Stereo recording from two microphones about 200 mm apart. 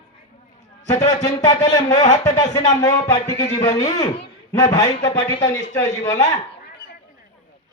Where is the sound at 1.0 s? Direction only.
20° left (ahead or behind).